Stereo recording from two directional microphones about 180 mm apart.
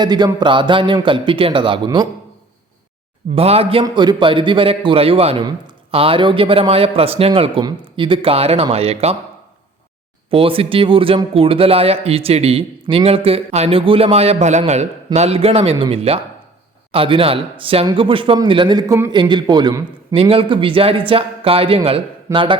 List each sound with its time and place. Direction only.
0.0 s speech: 25° right (ahead or behind)
3.3 s speech: 35° right (ahead or behind)
10.2 s speech: 30° right (ahead or behind)